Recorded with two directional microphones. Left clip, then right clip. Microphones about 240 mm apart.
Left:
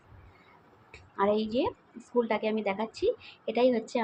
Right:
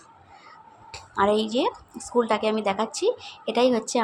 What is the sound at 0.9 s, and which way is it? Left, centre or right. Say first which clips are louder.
Speech: right 6 dB; right.